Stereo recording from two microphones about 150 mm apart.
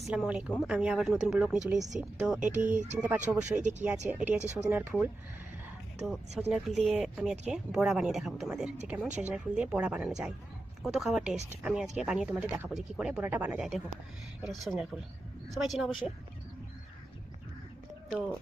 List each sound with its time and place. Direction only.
0.0 s speech: 5° right (ahead or behind)
2.6 s speech: 55° right (ahead or behind)
3.2 s speech: 10° right (ahead or behind)
3.6 s speech: 55° right (ahead or behind)
4.1 s speech: 10° right (ahead or behind)
4.4 s speech: 50° right (ahead or behind)
4.7 s speech: 10° right (ahead or behind)
6.0 s speech: centre (ahead or behind)
14.4 s speech: centre (ahead or behind)